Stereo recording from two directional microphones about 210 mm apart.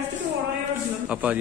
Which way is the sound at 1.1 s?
5° right (ahead or behind).